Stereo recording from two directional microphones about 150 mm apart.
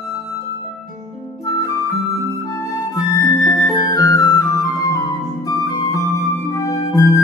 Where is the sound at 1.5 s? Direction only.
20° left (ahead or behind).